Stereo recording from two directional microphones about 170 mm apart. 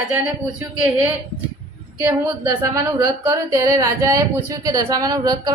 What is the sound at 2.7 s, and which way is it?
Speech, 20° right (ahead or behind).